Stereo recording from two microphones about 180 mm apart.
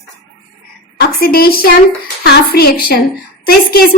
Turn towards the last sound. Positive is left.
turn(degrees=60)  # may be behind; listen again after turning